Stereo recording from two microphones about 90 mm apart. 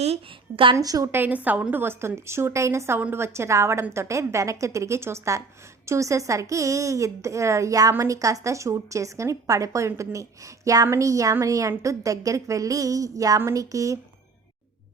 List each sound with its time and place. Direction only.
0.5 s a woman's voice: 70° right (ahead or behind)
0.8 s speech: 40° right (ahead or behind)
1.1 s a woman's voice: 20° right (ahead or behind); by 14.0 s 35° right (ahead or behind)